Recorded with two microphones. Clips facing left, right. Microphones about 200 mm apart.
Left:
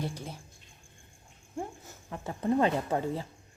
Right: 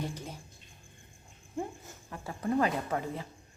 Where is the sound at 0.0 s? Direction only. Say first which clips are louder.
Left 1 dB; 10° left (ahead or behind).